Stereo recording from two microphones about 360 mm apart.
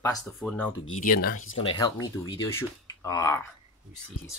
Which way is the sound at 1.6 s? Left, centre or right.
Centre.